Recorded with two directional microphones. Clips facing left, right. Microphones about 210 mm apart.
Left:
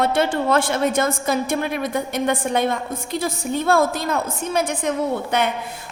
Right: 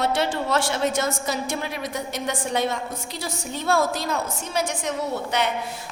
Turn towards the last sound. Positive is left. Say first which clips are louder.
# left 4 dB
turn(degrees=55)  # may be behind; listen again after turning